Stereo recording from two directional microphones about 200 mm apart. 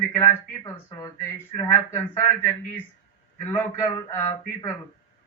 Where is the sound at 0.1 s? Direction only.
15° left (ahead or behind).